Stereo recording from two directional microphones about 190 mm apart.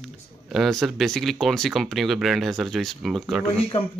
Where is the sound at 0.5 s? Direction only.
Centre (ahead or behind).